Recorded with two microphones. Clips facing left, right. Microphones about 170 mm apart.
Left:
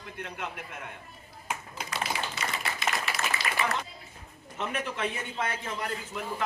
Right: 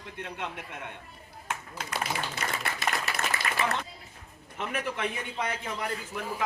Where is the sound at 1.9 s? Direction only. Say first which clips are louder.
Right 1 dB; 55° right (ahead or behind).